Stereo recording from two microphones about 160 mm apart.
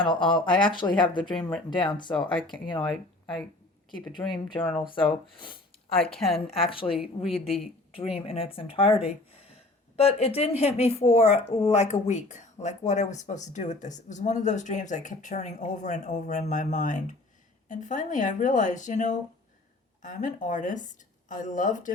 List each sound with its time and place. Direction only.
0.0 s speech: 30° left (ahead or behind)
2.8 s speech: centre (ahead or behind)
4.2 s speech: 15° left (ahead or behind)
4.6 s speech: centre (ahead or behind)
4.9 s speech: 30° left (ahead or behind); by 21.9 s 55° left (ahead or behind)